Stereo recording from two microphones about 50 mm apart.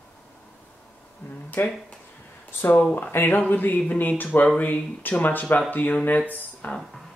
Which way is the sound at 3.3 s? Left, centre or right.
Left.